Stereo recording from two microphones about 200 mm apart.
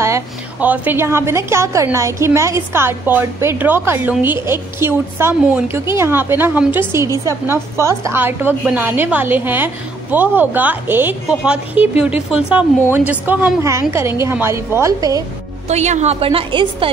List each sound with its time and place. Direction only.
0.0 s a woman's voice: 10° right (ahead or behind)
15.7 s a woman's voice: 35° right (ahead or behind)